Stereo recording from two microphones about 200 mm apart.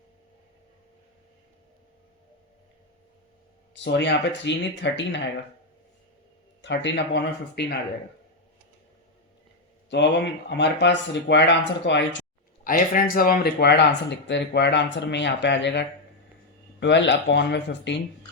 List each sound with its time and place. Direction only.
3.8 s speech: 60° left (ahead or behind)
6.6 s speech: 60° left (ahead or behind)
9.9 s speech: 60° left (ahead or behind)
12.6 s speech: 45° left (ahead or behind); by 15.8 s 60° left (ahead or behind)
16.8 s speech: 60° left (ahead or behind)